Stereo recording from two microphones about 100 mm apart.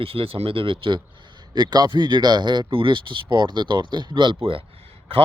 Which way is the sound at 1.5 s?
45° right (ahead or behind).